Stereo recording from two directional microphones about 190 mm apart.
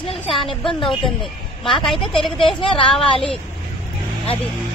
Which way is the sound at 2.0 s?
30° left (ahead or behind).